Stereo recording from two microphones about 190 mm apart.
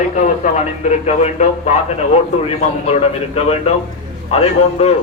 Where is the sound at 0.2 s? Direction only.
40° left (ahead or behind).